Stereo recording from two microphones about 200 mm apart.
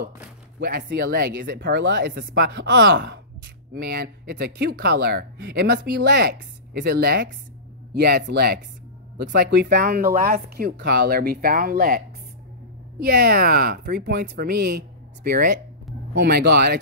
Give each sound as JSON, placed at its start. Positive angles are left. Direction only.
{"t": 0.6, "sound": "speech", "side_deg": -55}
{"t": 1.6, "sound": "speech", "side_deg": -65}
{"t": 3.7, "sound": "speech", "side_deg": -50}
{"t": 13.0, "sound": "speech", "side_deg": -50}